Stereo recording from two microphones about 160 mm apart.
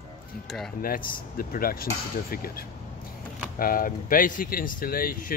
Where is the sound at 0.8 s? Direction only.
65° left (ahead or behind).